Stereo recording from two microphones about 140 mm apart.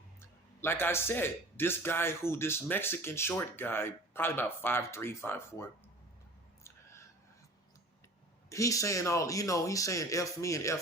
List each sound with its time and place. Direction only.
0.2 s a man's voice: 15° left (ahead or behind)
8.4 s a man's voice: 20° left (ahead or behind)